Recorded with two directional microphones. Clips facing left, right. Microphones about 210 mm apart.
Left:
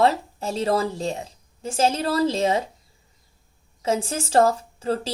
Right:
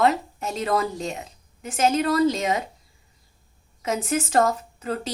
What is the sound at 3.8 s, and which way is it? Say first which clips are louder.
A woman's voice: even; 30° left (ahead or behind).